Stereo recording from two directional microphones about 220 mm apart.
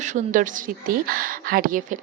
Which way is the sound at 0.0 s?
35° right (ahead or behind).